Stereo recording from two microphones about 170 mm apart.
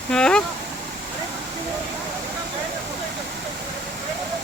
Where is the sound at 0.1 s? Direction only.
5° left (ahead or behind).